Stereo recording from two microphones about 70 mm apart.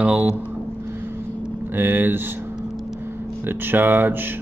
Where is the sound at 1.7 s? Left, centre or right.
Right.